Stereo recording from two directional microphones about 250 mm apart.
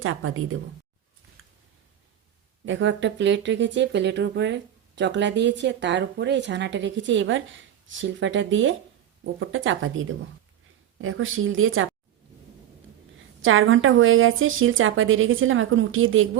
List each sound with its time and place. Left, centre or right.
0.0 s speech: right
1.4 s a sound: right
2.6 s speech: right
13.4 s speech: right